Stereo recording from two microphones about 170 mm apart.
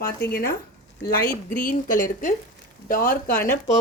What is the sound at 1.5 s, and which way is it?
A woman's voice, 50° left (ahead or behind).